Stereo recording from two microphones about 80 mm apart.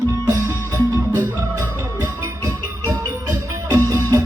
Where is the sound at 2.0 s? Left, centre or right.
Right.